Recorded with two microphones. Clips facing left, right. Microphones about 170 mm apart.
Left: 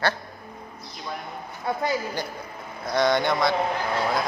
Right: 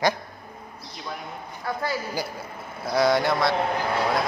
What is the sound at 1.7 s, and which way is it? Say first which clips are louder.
Speech: left 2 dB; 20° left (ahead or behind).